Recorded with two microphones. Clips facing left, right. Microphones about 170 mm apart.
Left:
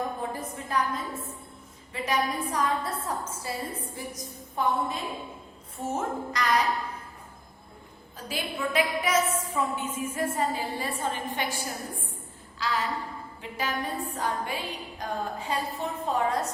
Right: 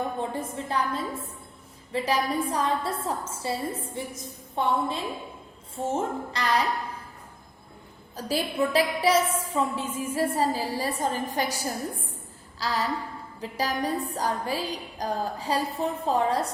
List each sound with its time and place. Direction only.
0.2 s a woman's voice: 30° right (ahead or behind)
8.1 s a woman's voice: 40° right (ahead or behind)